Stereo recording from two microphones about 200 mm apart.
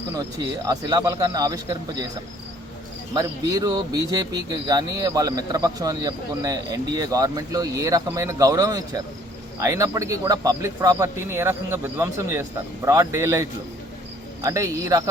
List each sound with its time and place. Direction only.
0.7 s speech: 20° right (ahead or behind)
3.2 s speech: 20° right (ahead or behind)